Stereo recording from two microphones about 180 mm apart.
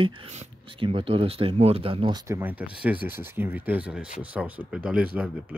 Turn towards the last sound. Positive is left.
turn(degrees=-5)  # may be behind; listen again after turning